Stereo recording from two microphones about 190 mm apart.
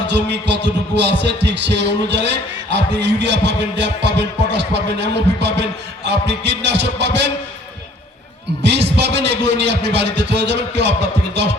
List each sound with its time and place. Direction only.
0.0 s heart sounds: 65° right (ahead or behind)
8.6 s heart sounds: 65° right (ahead or behind)